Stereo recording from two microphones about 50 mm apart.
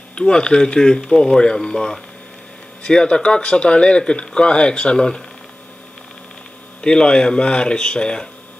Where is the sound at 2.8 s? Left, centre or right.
Centre.